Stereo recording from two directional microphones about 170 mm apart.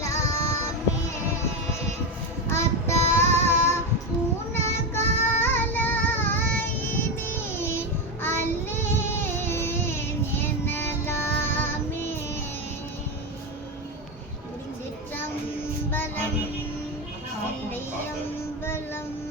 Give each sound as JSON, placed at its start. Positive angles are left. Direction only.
{"t": 0.0, "sound": "child singing", "side_deg": 20}
{"t": 2.5, "sound": "child singing", "side_deg": 15}
{"t": 7.3, "sound": "music", "side_deg": 15}
{"t": 8.2, "sound": "child singing", "side_deg": 15}
{"t": 15.9, "sound": "child singing", "side_deg": 10}